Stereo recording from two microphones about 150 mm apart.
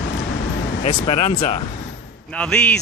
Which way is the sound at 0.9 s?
35° left (ahead or behind).